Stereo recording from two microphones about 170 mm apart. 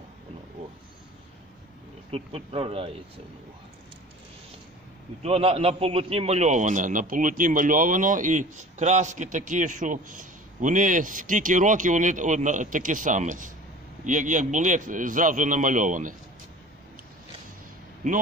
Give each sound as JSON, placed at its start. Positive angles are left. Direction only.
{"t": 2.0, "sound": "speech", "side_deg": -35}
{"t": 5.2, "sound": "a man's voice", "side_deg": -35}
{"t": 18.0, "sound": "a man's voice", "side_deg": -50}